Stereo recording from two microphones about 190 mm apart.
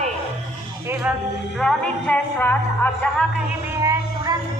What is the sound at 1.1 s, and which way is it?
Speech, 5° right (ahead or behind).